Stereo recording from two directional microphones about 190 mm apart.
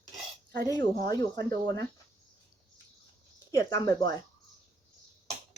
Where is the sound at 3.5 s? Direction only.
15° left (ahead or behind).